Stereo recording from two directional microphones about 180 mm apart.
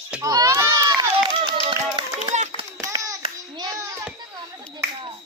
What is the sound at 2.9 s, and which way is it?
Hands, 20° right (ahead or behind).